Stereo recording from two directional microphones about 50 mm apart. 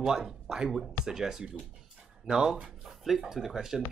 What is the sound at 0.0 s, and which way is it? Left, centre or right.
Speech, centre.